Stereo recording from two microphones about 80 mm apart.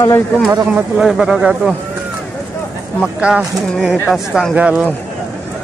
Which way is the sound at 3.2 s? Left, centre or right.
Centre.